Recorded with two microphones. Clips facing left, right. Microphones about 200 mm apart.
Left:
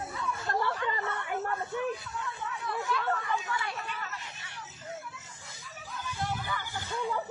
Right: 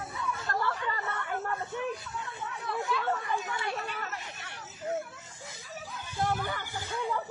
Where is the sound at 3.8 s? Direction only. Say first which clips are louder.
Right 2 dB; 50° right (ahead or behind).